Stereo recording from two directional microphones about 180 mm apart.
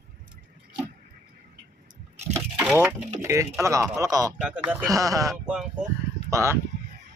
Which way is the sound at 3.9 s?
20° right (ahead or behind).